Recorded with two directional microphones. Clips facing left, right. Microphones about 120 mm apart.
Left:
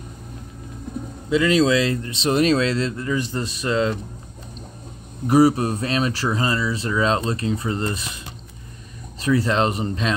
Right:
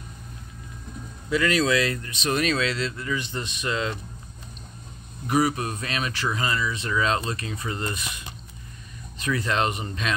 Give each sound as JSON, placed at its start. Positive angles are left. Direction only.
{"t": 1.3, "sound": "speech", "side_deg": 25}
{"t": 5.2, "sound": "speech", "side_deg": 35}
{"t": 9.2, "sound": "speech", "side_deg": 30}